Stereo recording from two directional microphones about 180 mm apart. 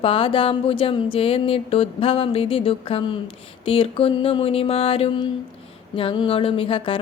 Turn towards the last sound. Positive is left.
turn(degrees=30)  # may be behind; listen again after turning